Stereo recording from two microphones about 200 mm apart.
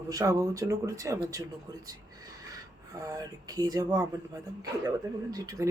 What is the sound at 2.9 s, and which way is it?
Speech, 20° right (ahead or behind).